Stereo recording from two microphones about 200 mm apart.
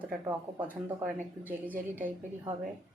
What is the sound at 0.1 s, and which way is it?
Speech, 10° right (ahead or behind).